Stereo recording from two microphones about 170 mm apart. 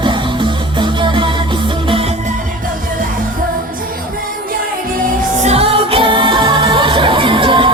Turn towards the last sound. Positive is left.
turn(degrees=-30)  # may be behind; listen again after turning